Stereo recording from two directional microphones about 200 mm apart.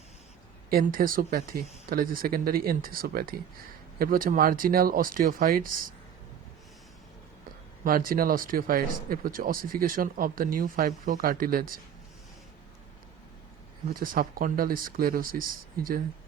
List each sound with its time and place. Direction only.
0.7 s speech: 45° right (ahead or behind)
7.9 s speech: 45° right (ahead or behind)
13.9 s speech: 45° right (ahead or behind)